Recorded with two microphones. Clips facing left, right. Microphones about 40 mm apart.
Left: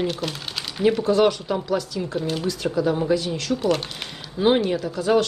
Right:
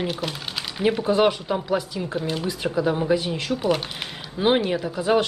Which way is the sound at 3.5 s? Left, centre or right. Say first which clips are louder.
Left 1 dB; centre.